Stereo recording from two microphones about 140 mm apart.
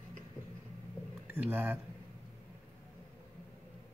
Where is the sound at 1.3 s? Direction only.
15° right (ahead or behind).